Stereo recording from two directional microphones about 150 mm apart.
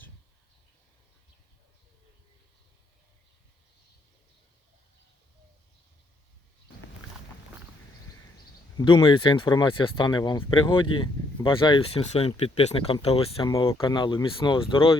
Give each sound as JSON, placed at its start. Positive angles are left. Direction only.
{"t": 8.8, "sound": "speech", "side_deg": 30}